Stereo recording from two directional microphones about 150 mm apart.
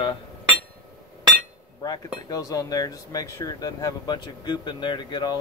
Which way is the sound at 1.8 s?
25° left (ahead or behind).